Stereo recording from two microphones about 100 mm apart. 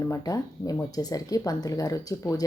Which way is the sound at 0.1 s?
35° left (ahead or behind).